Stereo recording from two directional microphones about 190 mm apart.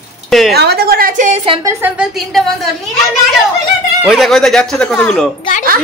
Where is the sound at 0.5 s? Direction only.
60° right (ahead or behind).